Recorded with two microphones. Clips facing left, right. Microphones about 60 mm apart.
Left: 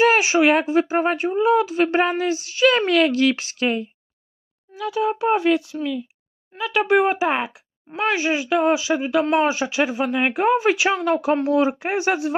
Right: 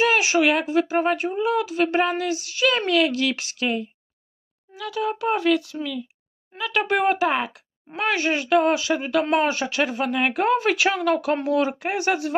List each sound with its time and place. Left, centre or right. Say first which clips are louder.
0.0 s speech: left 3 dB; left
4.8 s speech: left 4 dB; centre
5.8 s speech: left 4 dB; centre
7.9 s speech: left 2 dB; centre; by 12.3 s left